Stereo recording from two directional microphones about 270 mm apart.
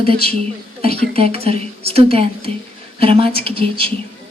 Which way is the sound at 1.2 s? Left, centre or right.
Right.